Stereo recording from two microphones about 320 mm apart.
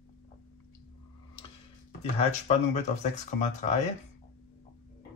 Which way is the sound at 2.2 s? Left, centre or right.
Left.